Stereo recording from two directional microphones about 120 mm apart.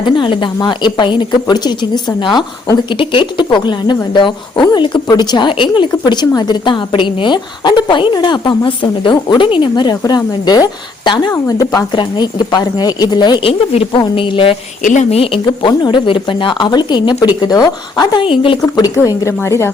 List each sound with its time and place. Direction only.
0.0 s a woman's voice: 40° left (ahead or behind)
13.5 s a woman's voice: 55° left (ahead or behind)
14.0 s a woman's voice: 45° left (ahead or behind)
14.8 s a woman's voice: 90° left
15.2 s a woman's voice: 45° left (ahead or behind)
18.9 s speech: 25° left (ahead or behind)